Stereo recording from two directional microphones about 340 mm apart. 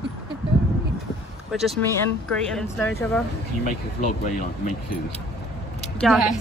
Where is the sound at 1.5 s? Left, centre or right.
Centre.